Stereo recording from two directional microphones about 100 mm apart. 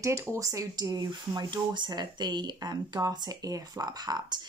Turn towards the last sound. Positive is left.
turn(degrees=-45)  # may be behind; listen again after turning